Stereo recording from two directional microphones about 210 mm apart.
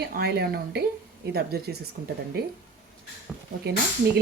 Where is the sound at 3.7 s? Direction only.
50° right (ahead or behind).